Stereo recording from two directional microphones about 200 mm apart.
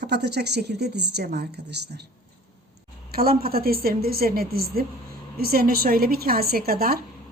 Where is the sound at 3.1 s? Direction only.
50° right (ahead or behind).